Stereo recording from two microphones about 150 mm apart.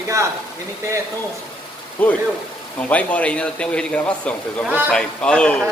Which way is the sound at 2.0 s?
10° left (ahead or behind).